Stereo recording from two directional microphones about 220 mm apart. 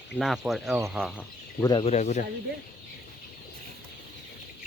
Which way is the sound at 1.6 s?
25° left (ahead or behind).